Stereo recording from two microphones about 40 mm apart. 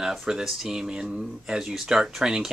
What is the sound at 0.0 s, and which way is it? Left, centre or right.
Speech, centre.